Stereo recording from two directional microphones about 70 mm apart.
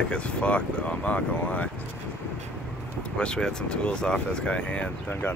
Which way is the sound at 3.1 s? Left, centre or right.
Centre.